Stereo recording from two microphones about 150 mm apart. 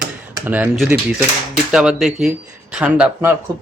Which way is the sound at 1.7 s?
5° right (ahead or behind).